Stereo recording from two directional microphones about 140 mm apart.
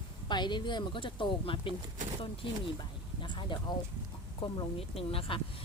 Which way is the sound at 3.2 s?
35° left (ahead or behind).